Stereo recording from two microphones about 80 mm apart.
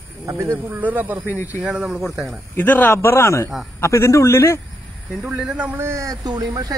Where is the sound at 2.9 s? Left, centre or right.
Left.